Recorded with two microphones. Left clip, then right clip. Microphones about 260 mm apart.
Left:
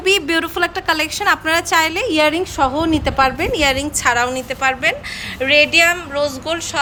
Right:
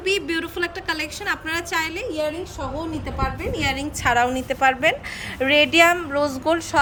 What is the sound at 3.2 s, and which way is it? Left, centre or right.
Speech, left.